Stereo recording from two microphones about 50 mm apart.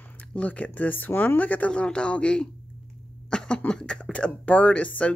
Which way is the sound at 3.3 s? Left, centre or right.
Centre.